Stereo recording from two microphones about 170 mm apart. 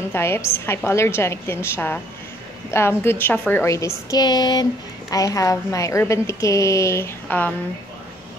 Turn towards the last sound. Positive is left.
turn(degrees=10)  # may be behind; listen again after turning